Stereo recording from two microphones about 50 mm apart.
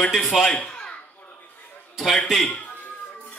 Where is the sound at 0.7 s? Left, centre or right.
Left.